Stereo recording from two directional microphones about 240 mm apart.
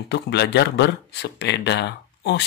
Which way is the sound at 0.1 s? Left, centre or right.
Left.